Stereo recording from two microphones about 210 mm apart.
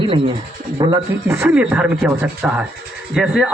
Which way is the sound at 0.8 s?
20° right (ahead or behind).